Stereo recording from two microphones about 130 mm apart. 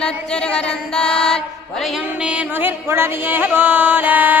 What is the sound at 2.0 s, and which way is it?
Music, 10° right (ahead or behind).